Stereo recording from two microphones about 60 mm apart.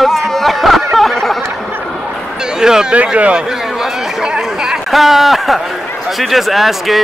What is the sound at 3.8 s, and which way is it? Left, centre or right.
Chatter, centre.